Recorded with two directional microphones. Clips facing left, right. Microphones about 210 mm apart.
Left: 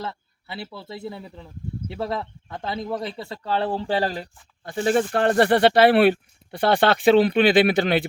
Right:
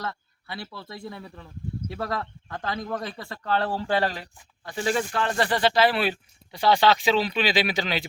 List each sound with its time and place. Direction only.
0.5 s speech: 25° left (ahead or behind)
4.0 s speech: 35° left (ahead or behind)
4.9 s speech: 55° left (ahead or behind)